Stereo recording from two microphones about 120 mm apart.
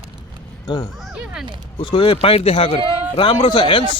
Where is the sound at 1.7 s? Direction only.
50° left (ahead or behind).